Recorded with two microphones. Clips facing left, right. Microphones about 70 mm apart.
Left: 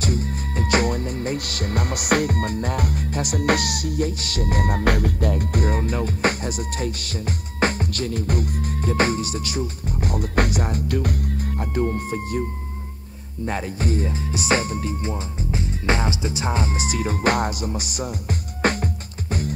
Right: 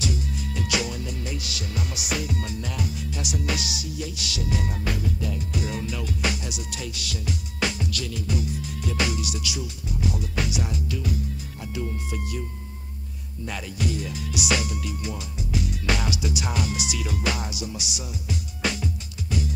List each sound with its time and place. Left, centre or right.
0.0 s music: left
13.5 s music: left